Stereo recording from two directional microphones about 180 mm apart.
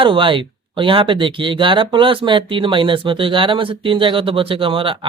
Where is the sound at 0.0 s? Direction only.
25° right (ahead or behind).